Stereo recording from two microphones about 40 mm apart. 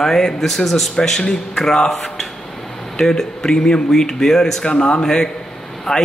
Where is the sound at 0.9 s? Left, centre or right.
Centre.